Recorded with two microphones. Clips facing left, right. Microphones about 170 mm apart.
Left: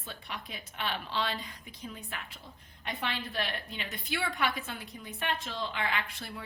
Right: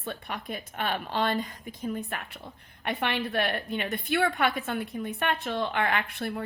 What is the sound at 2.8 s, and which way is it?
A woman's voice, 65° right (ahead or behind).